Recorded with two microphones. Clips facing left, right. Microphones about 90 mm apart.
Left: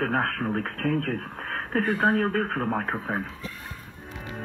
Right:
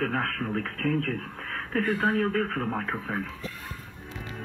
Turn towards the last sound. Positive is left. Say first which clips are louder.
# left 2 dB
turn(degrees=25)  # may be behind; listen again after turning